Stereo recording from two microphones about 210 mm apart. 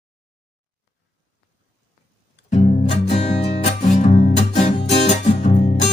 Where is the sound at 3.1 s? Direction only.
30° left (ahead or behind).